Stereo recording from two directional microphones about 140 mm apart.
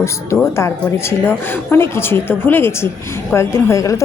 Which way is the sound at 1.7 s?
15° left (ahead or behind).